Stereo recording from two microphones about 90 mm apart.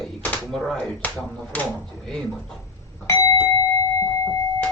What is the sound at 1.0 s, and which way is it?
Speech, 15° left (ahead or behind).